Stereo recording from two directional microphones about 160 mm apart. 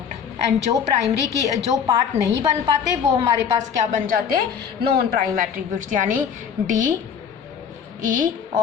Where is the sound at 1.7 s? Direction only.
20° right (ahead or behind).